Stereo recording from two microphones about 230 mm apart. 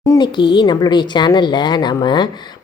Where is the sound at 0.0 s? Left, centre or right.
Centre.